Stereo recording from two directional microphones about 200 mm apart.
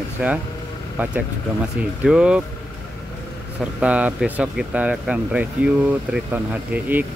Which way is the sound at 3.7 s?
5° right (ahead or behind).